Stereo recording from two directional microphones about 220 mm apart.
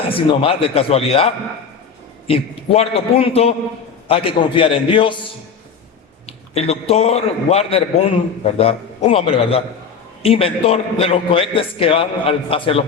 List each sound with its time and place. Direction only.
0.1 s a man's voice: 25° left (ahead or behind)
6.5 s a man's voice: 30° left (ahead or behind)